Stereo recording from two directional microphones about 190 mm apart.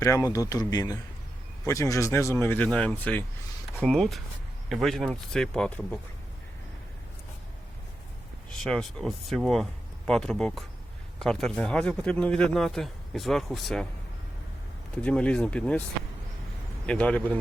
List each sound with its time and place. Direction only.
0.0 s speech: 15° left (ahead or behind)
8.4 s speech: centre (ahead or behind)
15.0 s speech: 5° left (ahead or behind)
16.8 s speech: 5° left (ahead or behind)